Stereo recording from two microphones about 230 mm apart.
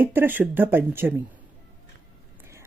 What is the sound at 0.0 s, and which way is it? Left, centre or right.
Speech, centre.